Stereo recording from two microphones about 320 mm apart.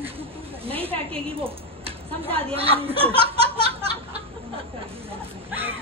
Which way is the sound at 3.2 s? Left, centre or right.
Centre.